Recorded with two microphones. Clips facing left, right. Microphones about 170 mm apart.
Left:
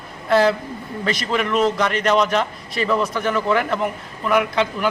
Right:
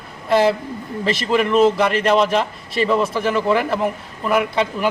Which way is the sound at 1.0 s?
30° right (ahead or behind).